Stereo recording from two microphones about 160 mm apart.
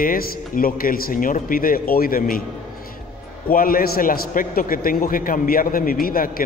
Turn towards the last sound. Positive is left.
turn(degrees=65)  # may be behind; listen again after turning